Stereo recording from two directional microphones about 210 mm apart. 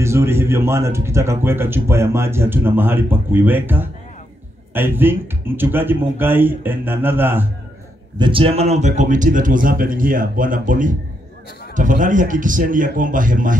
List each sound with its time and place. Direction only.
0.0 s speech: 10° right (ahead or behind)
8.2 s a man's voice: 25° right (ahead or behind)